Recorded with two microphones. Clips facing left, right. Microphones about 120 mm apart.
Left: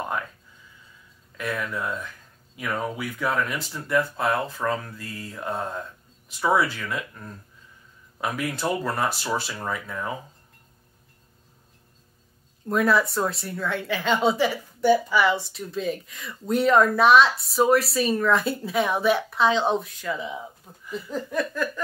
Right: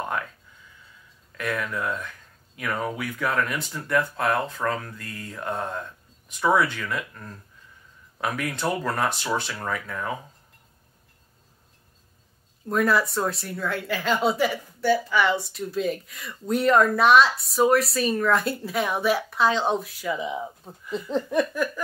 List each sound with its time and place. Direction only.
1.3 s speech: 5° left (ahead or behind)
12.6 s speech: centre (ahead or behind)
14.8 s speech: 15° left (ahead or behind)
15.2 s speech: centre (ahead or behind)
20.1 s speech: 15° right (ahead or behind)
20.6 s speech: 25° right (ahead or behind)